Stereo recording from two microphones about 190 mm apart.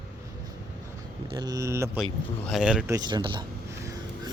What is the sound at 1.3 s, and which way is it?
Speech, 20° right (ahead or behind).